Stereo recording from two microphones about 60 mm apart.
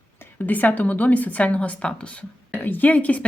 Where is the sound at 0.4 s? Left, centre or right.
Left.